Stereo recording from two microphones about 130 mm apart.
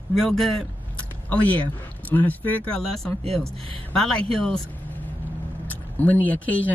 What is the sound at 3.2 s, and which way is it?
Speech, 45° right (ahead or behind).